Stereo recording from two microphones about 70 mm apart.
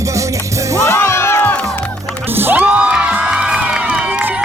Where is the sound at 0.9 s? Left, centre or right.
Left.